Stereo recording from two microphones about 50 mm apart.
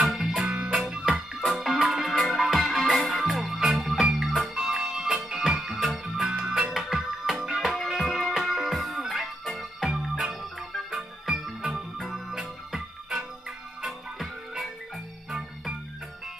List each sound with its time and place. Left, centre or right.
0.0 s music: centre
0.5 s music: centre
13.8 s music: centre